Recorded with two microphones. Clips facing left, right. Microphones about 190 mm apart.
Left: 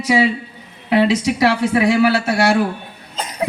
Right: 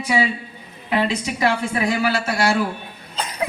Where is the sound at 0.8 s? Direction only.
80° left.